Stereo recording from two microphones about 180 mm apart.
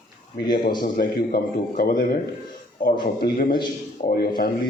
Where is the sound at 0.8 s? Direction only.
55° left (ahead or behind).